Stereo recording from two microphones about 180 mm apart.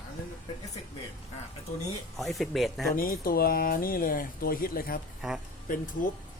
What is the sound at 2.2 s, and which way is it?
Speech, centre (ahead or behind).